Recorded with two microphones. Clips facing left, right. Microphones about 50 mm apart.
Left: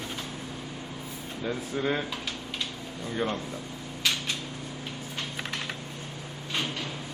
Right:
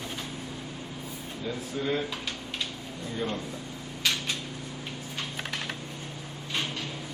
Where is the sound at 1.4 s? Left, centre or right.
Left.